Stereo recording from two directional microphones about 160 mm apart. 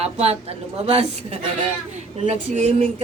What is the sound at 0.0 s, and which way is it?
A woman's voice, 40° right (ahead or behind).